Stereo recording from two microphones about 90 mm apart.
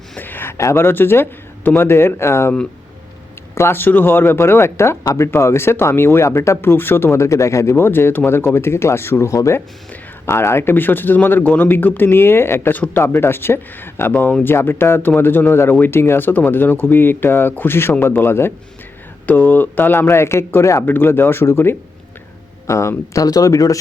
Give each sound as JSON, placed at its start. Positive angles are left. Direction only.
{"t": 0.2, "sound": "a man's voice", "side_deg": 20}
{"t": 3.5, "sound": "speech", "side_deg": 25}